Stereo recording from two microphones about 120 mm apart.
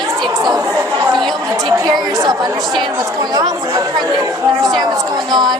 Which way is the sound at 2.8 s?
35° right (ahead or behind).